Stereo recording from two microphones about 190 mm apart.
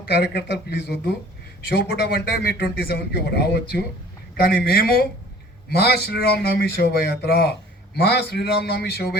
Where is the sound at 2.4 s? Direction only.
55° left (ahead or behind).